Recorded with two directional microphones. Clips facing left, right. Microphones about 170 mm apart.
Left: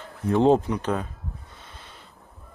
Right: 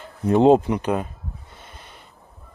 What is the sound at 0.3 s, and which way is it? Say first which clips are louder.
Speech: right 4 dB; 20° right (ahead or behind).